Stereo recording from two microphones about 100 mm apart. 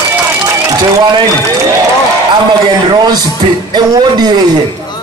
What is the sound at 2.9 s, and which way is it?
A man's voice, 45° right (ahead or behind).